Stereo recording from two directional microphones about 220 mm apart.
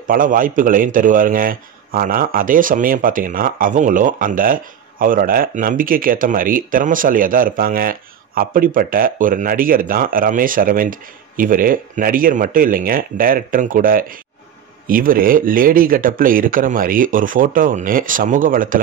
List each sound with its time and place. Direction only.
0.0 s a man's voice: 40° right (ahead or behind)